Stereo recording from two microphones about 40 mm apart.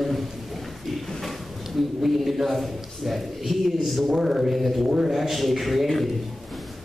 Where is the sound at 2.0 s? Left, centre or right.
Centre.